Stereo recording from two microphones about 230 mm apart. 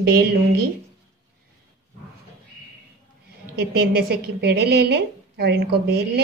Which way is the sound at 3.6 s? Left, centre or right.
Right.